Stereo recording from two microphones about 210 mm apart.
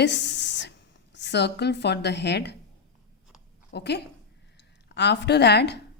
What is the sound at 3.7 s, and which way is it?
A woman's voice, 55° left (ahead or behind).